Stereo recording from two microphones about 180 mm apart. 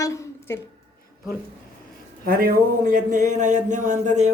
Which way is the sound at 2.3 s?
55° right (ahead or behind).